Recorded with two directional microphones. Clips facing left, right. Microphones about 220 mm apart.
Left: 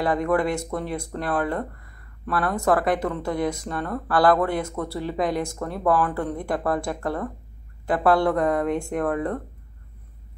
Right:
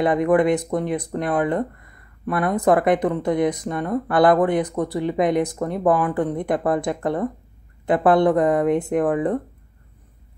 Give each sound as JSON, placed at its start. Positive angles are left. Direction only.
{"t": 0.0, "sound": "speech", "side_deg": -20}